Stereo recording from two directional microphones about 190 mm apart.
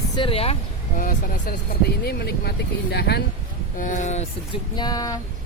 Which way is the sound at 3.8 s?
40° left (ahead or behind).